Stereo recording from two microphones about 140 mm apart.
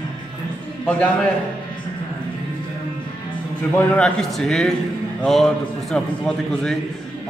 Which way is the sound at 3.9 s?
5° left (ahead or behind).